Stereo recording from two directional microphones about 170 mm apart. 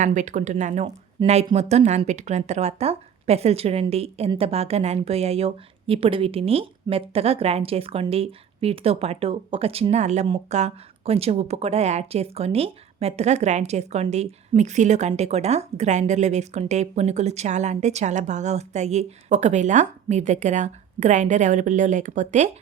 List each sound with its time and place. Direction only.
0.0 s speech: 45° right (ahead or behind)